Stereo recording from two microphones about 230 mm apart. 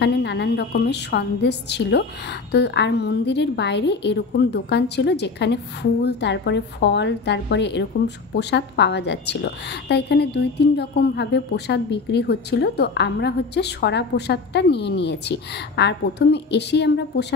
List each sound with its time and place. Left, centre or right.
0.0 s a woman's voice: left